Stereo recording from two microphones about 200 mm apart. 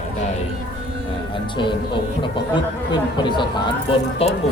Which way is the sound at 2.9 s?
25° left (ahead or behind).